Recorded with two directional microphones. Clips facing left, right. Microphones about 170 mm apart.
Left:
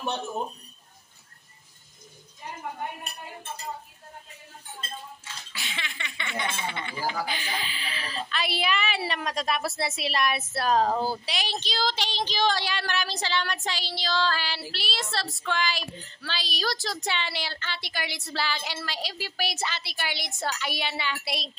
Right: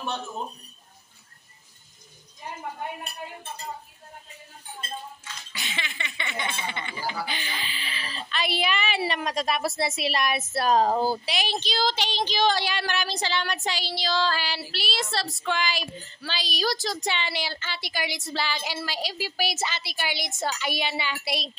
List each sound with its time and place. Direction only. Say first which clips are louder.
0.0 s speech: left 2 dB; 15° left (ahead or behind)
5.5 s a sound: right 3 dB; centre (ahead or behind)
7.1 s a woman's voice: left 2 dB; centre (ahead or behind)
10.9 s speech: right 3 dB; 25° right (ahead or behind)
11.2 s a woman's voice: right 3 dB; centre (ahead or behind)